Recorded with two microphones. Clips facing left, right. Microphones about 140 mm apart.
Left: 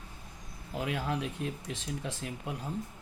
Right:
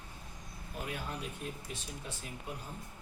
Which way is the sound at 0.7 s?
90° left.